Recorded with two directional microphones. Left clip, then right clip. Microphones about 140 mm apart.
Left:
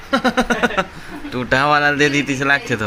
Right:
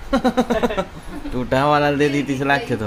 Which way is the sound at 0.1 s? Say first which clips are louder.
Left 2 dB; 20° right (ahead or behind).